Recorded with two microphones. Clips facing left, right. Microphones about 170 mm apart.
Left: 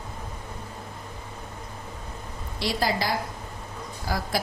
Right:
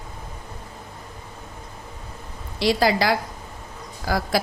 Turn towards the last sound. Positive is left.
turn(degrees=-80)